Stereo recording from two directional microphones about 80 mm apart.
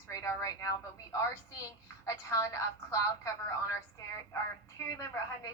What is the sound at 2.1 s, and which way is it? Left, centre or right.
Speech, left.